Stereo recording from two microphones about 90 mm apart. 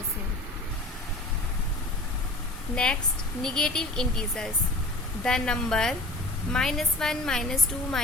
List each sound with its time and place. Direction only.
2.7 s a woman's voice: 10° left (ahead or behind)